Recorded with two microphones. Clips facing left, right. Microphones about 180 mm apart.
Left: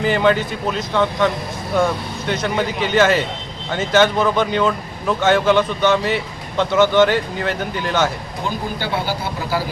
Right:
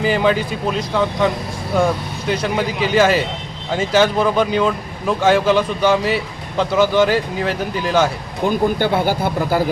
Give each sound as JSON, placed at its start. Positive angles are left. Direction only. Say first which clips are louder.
{"t": 0.0, "sound": "speech", "louder": "even", "side_deg": -5}
{"t": 2.3, "sound": "speech", "louder": "right 1 dB", "side_deg": -10}
{"t": 8.4, "sound": "speech", "louder": "right 8 dB", "side_deg": -50}